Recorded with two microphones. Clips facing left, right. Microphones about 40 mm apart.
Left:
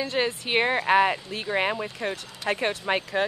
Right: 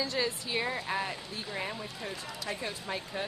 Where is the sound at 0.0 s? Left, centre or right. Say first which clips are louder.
Left 6 dB; left.